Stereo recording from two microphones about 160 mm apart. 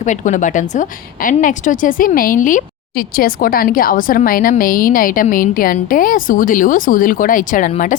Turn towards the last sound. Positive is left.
turn(degrees=55)  # may be behind; listen again after turning